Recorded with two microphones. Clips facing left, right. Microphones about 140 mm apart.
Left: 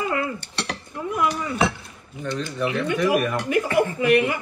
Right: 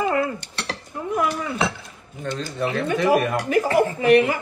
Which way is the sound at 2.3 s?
35° right (ahead or behind).